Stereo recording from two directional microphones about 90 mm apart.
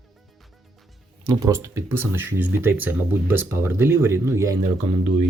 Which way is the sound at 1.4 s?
30° right (ahead or behind).